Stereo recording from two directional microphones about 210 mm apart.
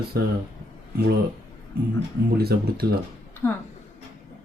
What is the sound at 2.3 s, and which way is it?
Speech, 50° right (ahead or behind).